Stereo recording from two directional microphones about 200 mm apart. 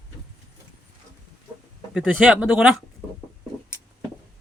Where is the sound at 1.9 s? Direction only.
5° right (ahead or behind).